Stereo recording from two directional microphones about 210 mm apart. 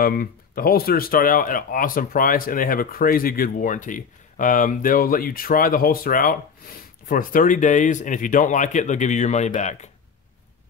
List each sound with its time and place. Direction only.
0.0 s speech: 45° left (ahead or behind)